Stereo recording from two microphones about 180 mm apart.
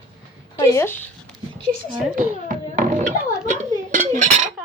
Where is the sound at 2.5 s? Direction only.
45° right (ahead or behind).